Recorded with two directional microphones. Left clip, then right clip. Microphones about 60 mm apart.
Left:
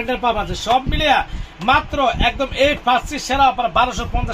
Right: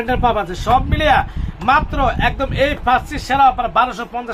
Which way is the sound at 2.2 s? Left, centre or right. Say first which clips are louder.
Even; left.